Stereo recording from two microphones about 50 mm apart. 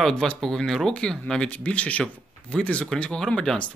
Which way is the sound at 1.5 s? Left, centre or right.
Left.